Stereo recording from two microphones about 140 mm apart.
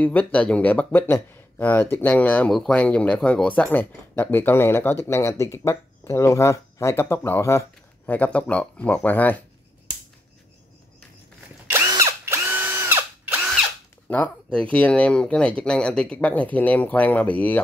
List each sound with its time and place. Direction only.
0.0 s speech: 10° left (ahead or behind)
11.7 s drill: 20° right (ahead or behind)
14.0 s speech: 10° left (ahead or behind)